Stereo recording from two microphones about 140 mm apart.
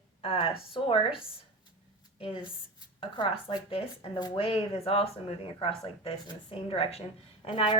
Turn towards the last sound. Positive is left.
turn(degrees=35)  # may be behind; listen again after turning